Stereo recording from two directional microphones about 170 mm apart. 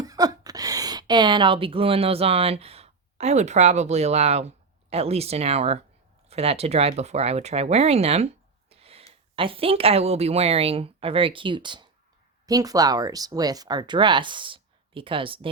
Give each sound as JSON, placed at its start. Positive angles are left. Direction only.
{"t": 0.0, "sound": "a woman's voice", "side_deg": -20}
{"t": 8.7, "sound": "a sound", "side_deg": -35}
{"t": 9.3, "sound": "a woman's voice", "side_deg": -30}